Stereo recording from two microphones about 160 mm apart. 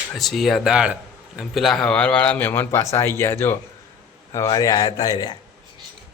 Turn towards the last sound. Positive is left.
turn(degrees=25)  # may be behind; listen again after turning